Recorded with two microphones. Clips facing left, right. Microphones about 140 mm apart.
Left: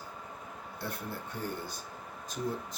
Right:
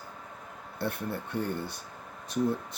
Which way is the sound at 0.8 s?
60° right (ahead or behind).